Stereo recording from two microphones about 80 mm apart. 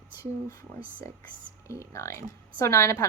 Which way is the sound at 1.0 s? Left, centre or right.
Left.